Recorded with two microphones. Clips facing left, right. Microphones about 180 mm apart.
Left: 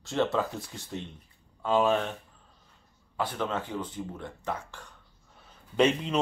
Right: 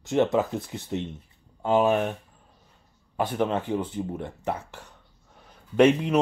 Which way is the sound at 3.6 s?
60° right (ahead or behind).